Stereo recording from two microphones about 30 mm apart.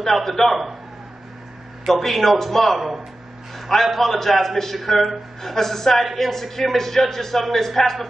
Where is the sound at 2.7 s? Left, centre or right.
Centre.